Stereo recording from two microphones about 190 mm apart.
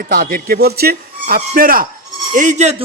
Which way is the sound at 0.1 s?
50° right (ahead or behind).